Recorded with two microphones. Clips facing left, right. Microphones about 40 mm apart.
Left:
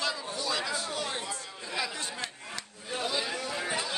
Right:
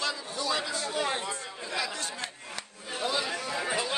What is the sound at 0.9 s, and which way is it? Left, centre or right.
Speech, centre.